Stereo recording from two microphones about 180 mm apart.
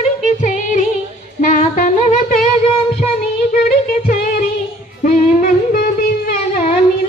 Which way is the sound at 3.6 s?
55° left (ahead or behind).